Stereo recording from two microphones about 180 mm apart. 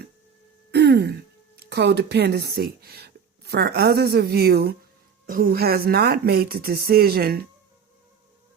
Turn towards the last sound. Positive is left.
turn(degrees=-60)  # may be behind; listen again after turning